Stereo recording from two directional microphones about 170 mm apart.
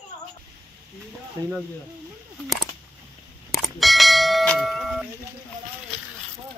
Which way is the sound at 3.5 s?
Centre (ahead or behind).